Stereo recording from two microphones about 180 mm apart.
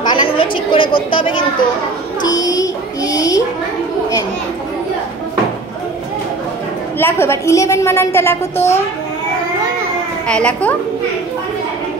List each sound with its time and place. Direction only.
0.1 s a sound: 30° left (ahead or behind)
0.9 s speech: 30° left (ahead or behind)
2.2 s child singing: 20° left (ahead or behind)
7.0 s a woman's voice: 15° left (ahead or behind)
10.2 s a woman's voice: 5° left (ahead or behind)